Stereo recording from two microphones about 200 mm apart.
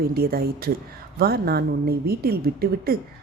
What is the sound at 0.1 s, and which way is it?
A woman's voice, 50° right (ahead or behind).